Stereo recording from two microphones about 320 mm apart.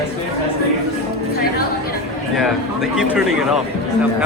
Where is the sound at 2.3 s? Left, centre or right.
Centre.